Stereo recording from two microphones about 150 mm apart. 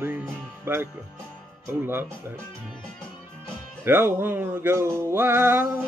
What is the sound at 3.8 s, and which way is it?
Speech, 15° right (ahead or behind).